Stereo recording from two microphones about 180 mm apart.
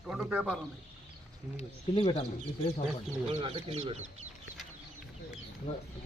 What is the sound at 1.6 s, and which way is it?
Speech, 30° left (ahead or behind).